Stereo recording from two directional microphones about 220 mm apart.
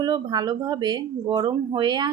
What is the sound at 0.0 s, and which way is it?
Speech, 20° right (ahead or behind).